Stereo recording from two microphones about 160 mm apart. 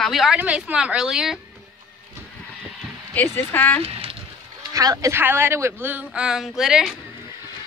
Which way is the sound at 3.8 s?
35° right (ahead or behind).